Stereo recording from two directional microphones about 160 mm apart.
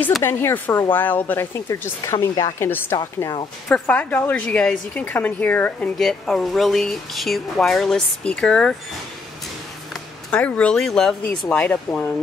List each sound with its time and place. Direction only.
0.2 s speech: 15° left (ahead or behind)
3.0 s speech: 25° left (ahead or behind)
3.6 s a woman's voice: 10° left (ahead or behind)
10.3 s speech: 10° left (ahead or behind)